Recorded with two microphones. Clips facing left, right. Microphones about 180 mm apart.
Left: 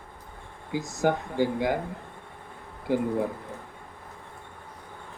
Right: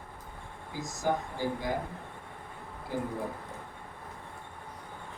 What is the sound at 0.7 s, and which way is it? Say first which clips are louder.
Speech: left 6 dB; 70° left (ahead or behind).